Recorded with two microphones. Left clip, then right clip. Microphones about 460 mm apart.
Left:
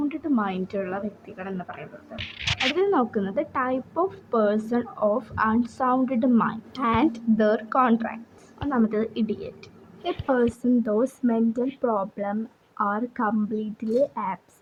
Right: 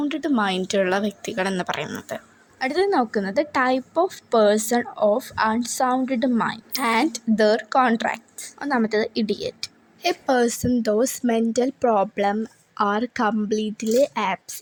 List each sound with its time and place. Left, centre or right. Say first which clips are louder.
0.1 s a woman's voice: right 4 dB; left
2.7 s a woman's voice: right 7 dB; left